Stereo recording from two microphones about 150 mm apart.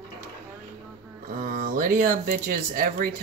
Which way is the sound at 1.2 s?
60° right (ahead or behind).